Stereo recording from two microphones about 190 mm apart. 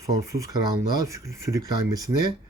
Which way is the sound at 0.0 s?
15° right (ahead or behind).